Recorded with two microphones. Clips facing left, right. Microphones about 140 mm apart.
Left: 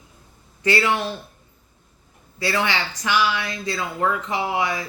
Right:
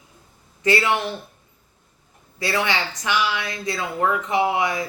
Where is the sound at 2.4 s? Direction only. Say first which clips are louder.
Even; 20° right (ahead or behind).